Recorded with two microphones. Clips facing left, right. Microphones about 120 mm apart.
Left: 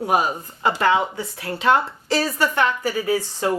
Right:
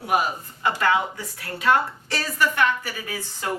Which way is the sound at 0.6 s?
25° left (ahead or behind).